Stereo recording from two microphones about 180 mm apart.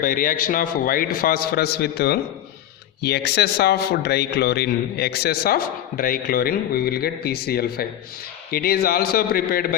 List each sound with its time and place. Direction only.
0.0 s a man's voice: 55° left (ahead or behind)